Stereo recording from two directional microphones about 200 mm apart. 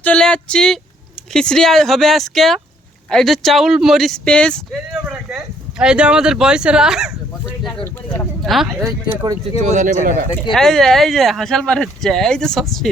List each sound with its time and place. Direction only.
0.0 s speech: 5° left (ahead or behind)
8.1 s speech: 5° left (ahead or behind)
8.9 s speech: 20° right (ahead or behind)
9.7 s speech: 40° right (ahead or behind)
10.5 s speech: centre (ahead or behind)